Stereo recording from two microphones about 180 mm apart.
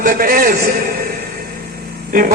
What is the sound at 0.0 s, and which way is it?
Speech, 50° right (ahead or behind).